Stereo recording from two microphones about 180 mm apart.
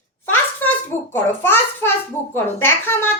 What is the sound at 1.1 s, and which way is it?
A child's voice, 10° left (ahead or behind).